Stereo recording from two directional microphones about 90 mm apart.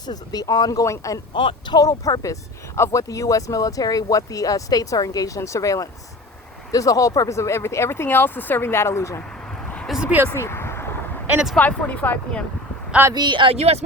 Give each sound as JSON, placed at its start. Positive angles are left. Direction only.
{"t": 0.0, "sound": "speech", "side_deg": 45}
{"t": 1.3, "sound": "speech", "side_deg": 65}
{"t": 9.8, "sound": "a sound", "side_deg": -5}
{"t": 10.3, "sound": "a sound", "side_deg": 30}
{"t": 11.5, "sound": "speech", "side_deg": 15}
{"t": 13.1, "sound": "speech", "side_deg": -60}